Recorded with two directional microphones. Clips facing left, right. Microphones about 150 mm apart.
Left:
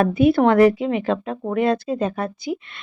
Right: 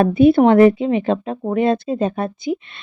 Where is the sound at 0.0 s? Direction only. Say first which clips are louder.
Right 4 dB; 25° right (ahead or behind).